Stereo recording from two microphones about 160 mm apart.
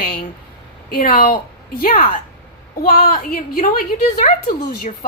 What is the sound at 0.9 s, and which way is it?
A woman's voice, 65° left (ahead or behind).